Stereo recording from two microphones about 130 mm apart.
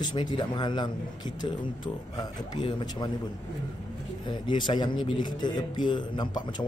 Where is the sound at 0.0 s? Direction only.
35° left (ahead or behind).